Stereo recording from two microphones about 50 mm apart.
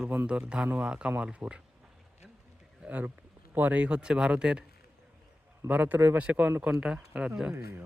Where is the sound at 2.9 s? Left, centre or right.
Right; by 4.7 s centre.